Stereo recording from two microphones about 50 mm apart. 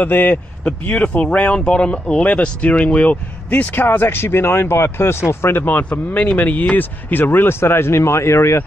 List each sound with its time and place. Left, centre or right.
0.0 s speech: left
0.7 s speech: left
3.7 s speech: left
5.9 s speech: left
6.3 s speech: left